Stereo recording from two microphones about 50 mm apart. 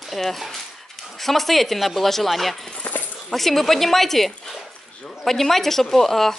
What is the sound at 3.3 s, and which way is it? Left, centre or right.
Speech, centre.